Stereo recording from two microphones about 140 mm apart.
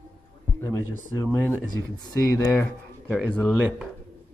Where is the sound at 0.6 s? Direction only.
20° left (ahead or behind).